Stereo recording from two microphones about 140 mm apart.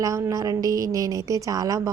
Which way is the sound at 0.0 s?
25° right (ahead or behind).